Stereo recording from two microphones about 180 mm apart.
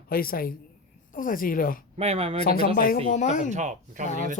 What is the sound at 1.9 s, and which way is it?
Speech, 35° right (ahead or behind).